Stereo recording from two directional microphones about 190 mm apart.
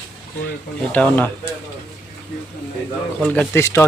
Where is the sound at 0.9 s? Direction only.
10° left (ahead or behind).